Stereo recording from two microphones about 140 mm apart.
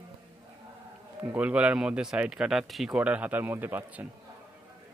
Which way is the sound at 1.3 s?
10° right (ahead or behind).